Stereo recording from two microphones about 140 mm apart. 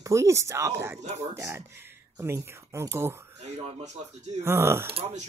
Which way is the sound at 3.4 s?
50° right (ahead or behind).